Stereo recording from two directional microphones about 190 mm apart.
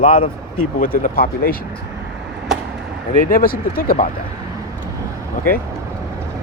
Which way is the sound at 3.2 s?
50° left (ahead or behind).